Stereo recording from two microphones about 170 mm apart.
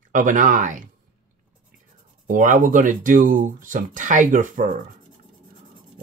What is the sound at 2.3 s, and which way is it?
Speech, 50° right (ahead or behind).